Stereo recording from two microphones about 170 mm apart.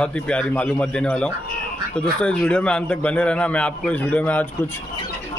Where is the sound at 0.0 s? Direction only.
5° left (ahead or behind).